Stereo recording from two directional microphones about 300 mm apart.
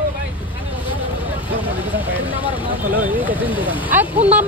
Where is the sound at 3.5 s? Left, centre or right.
Centre.